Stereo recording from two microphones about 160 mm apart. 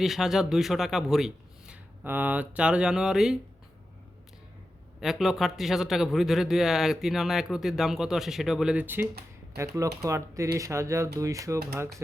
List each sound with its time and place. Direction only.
0.0 s a man's voice: centre (ahead or behind)
4.9 s a man's voice: centre (ahead or behind); by 11.9 s 15° right (ahead or behind)